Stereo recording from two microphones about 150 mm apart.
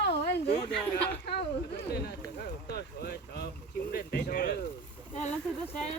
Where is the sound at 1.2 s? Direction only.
90° left.